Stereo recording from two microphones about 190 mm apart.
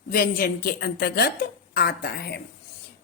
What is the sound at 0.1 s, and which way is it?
A woman's voice, 50° left (ahead or behind).